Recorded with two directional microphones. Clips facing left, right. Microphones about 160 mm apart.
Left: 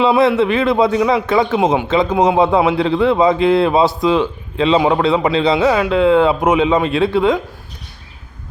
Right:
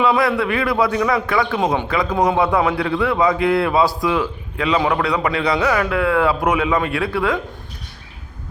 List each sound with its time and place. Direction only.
0.0 s a man's voice: 25° left (ahead or behind)